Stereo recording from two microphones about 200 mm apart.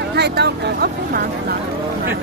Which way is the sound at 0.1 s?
55° right (ahead or behind).